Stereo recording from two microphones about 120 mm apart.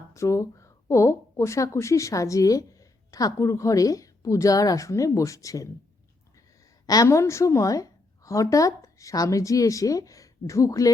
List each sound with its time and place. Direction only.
0.1 s speech: 25° left (ahead or behind)
6.8 s a woman's voice: 30° left (ahead or behind)